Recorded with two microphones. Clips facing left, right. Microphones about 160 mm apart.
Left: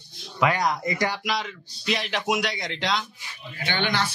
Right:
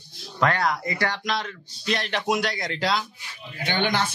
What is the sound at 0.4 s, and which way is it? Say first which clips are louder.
Speech: even; 15° left (ahead or behind).